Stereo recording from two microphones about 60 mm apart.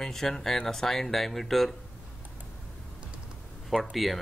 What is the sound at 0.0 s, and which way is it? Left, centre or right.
Speech, centre.